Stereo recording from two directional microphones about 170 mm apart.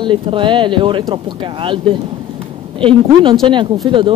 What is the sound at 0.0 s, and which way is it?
Speech, 30° right (ahead or behind).